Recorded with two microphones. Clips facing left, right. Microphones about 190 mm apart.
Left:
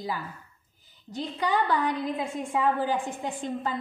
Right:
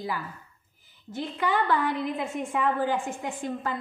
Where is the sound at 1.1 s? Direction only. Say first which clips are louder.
Even; 15° left (ahead or behind).